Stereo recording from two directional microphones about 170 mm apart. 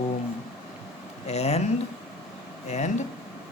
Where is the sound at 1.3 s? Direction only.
40° left (ahead or behind).